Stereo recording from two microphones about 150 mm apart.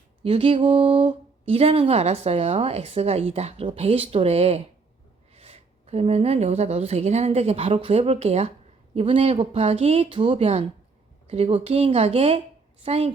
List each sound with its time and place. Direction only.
0.2 s a woman's voice: 40° right (ahead or behind)